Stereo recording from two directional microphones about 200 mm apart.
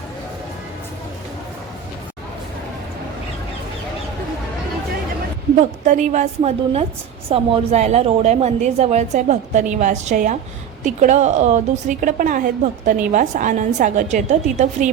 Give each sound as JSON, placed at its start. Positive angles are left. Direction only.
{"t": 5.5, "sound": "a woman's voice", "side_deg": -35}